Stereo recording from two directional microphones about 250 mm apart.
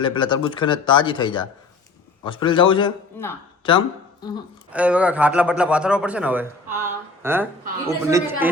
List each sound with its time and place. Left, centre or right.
0.0 s speech: centre
4.7 s a man's voice: centre